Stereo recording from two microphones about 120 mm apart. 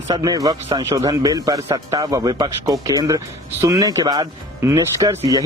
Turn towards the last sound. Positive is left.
turn(degrees=-25)  # may be behind; listen again after turning